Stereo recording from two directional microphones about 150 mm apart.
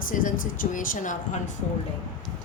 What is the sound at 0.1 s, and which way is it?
A woman's voice, 65° left (ahead or behind).